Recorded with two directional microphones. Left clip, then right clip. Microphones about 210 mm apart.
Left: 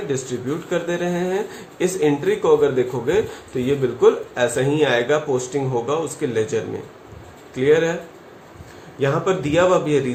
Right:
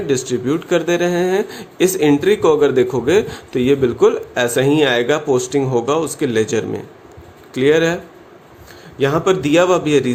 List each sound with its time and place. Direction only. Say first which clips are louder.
0.1 s speech: right 9 dB; 45° right (ahead or behind)
9.0 s speech: right 4 dB; 45° right (ahead or behind)